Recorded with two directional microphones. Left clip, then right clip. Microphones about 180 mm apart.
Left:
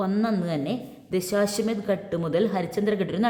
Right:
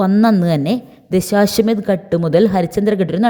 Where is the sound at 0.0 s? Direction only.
45° right (ahead or behind).